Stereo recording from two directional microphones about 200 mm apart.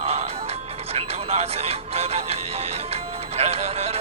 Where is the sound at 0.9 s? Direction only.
30° right (ahead or behind).